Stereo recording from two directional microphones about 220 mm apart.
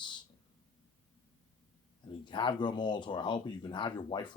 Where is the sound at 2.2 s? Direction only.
20° left (ahead or behind).